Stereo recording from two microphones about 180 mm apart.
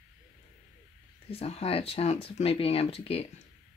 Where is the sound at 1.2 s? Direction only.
35° left (ahead or behind).